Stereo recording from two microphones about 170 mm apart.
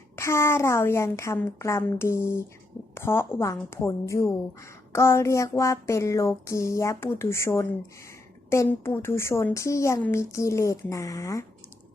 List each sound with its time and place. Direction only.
0.2 s a woman's voice: 15° left (ahead or behind)